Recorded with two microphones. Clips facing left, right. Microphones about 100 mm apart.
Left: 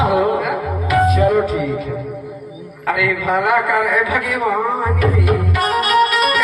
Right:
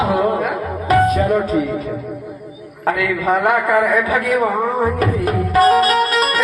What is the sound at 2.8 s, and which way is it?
A man's voice, 40° right (ahead or behind).